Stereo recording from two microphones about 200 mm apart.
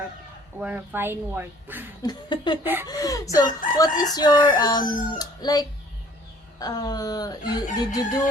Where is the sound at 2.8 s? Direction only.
20° left (ahead or behind).